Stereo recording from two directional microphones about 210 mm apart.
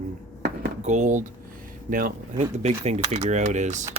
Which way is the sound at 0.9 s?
35° right (ahead or behind).